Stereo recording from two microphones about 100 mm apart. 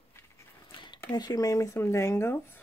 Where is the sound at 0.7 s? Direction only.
50° left (ahead or behind); by 2.6 s 25° left (ahead or behind).